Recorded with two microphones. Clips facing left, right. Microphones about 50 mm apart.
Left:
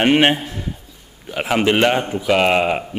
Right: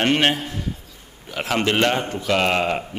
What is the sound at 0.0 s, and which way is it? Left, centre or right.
Speech, centre.